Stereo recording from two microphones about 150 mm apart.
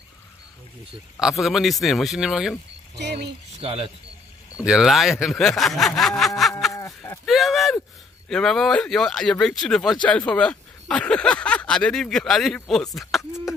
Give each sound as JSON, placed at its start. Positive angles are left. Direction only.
{"t": 1.2, "sound": "speech", "side_deg": 0}
{"t": 3.0, "sound": "speech", "side_deg": -90}
{"t": 3.5, "sound": "speech", "side_deg": -40}
{"t": 4.6, "sound": "speech", "side_deg": -5}